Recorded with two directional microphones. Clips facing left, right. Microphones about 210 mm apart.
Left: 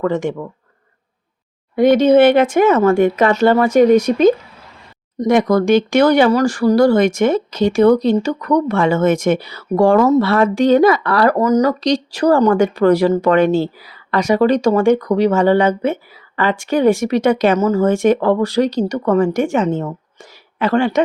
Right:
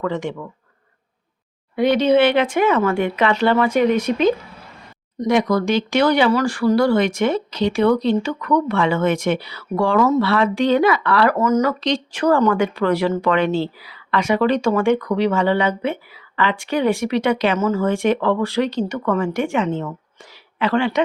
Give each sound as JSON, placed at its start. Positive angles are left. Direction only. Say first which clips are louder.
{"t": 0.0, "sound": "speech", "louder": "left 5 dB", "side_deg": 50}
{"t": 1.7, "sound": "speech", "louder": "left 5 dB", "side_deg": 45}